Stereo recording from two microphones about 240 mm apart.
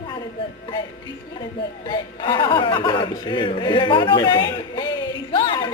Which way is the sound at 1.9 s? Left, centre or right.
Centre.